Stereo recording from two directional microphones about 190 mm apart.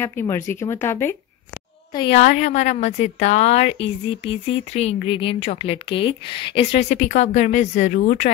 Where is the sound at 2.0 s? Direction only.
30° left (ahead or behind).